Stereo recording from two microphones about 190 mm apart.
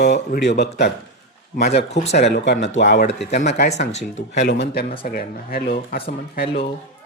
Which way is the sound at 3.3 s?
40° left (ahead or behind).